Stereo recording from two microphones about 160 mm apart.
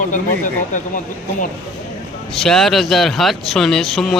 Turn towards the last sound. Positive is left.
turn(degrees=0)  # may be behind; listen again after turning